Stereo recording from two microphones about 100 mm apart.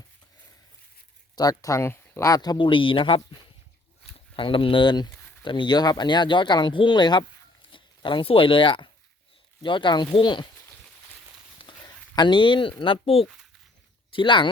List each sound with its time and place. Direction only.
1.4 s speech: 35° left (ahead or behind); by 10.4 s 55° left (ahead or behind)
11.6 s a sound: 45° left (ahead or behind)
12.8 s speech: 65° left (ahead or behind)
14.1 s speech: 55° left (ahead or behind)